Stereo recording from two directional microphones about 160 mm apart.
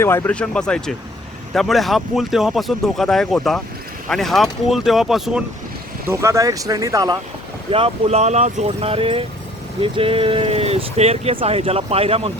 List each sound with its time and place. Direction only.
0.0 s speech: 15° left (ahead or behind); by 5.4 s centre (ahead or behind)
6.1 s speech: 20° right (ahead or behind)
7.7 s speech: 40° right (ahead or behind)